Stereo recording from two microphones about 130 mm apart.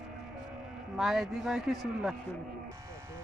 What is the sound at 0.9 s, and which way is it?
Speech, centre (ahead or behind).